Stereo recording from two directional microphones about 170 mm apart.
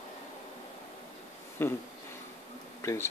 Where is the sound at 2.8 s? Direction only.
15° left (ahead or behind).